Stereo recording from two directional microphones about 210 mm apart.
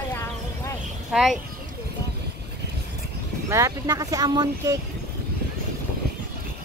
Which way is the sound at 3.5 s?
15° right (ahead or behind).